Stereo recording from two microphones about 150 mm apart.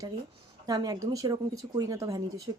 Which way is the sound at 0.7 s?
25° right (ahead or behind).